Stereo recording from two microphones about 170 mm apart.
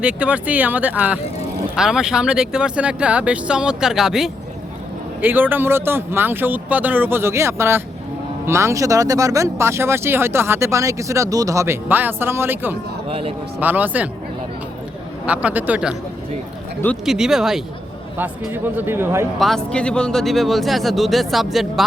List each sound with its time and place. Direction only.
0.0 s speech: 5° right (ahead or behind)
13.1 s speech: 35° right (ahead or behind)
13.6 s speech: 10° right (ahead or behind)
15.3 s speech: 10° right (ahead or behind)
17.1 s speech: 5° right (ahead or behind)
19.4 s speech: centre (ahead or behind)